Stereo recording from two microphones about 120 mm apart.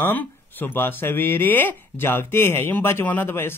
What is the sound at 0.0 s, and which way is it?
Speech, 15° left (ahead or behind).